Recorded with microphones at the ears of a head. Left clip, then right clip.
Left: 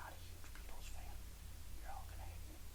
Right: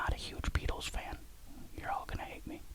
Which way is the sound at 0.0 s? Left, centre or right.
Right.